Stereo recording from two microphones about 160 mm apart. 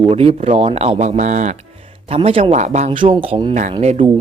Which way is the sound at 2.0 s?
35° right (ahead or behind).